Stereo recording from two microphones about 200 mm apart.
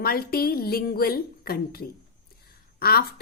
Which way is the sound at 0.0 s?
50° left (ahead or behind).